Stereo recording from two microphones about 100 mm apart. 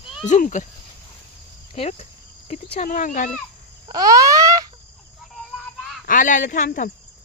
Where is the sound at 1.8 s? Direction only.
90° left.